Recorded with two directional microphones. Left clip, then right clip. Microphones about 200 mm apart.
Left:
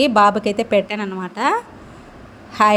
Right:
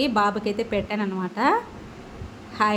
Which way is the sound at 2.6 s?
30° left (ahead or behind).